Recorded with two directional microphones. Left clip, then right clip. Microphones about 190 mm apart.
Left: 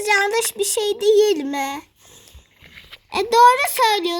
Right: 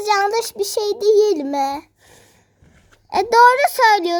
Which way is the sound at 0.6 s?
15° left (ahead or behind).